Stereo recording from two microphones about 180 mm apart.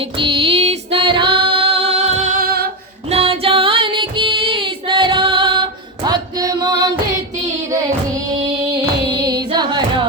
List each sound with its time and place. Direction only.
0.2 s music: 30° right (ahead or behind); by 2.6 s 55° right (ahead or behind)
3.1 s child singing: 35° right (ahead or behind)
6.1 s music: 20° right (ahead or behind)
9.0 s carnatic music: 20° right (ahead or behind)